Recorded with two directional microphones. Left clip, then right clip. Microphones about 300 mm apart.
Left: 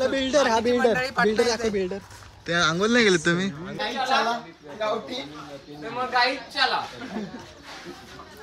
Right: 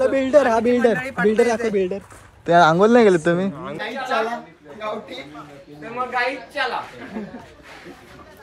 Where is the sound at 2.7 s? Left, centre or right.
Centre.